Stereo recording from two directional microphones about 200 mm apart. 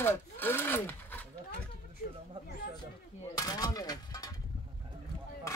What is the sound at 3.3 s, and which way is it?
Speech, 20° left (ahead or behind).